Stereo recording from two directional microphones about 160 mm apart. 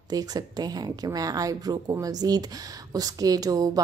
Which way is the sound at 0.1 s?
25° right (ahead or behind).